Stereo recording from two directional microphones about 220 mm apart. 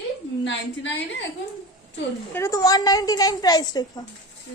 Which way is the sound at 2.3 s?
15° left (ahead or behind).